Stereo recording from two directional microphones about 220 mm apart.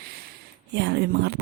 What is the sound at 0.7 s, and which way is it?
Speech, 50° right (ahead or behind).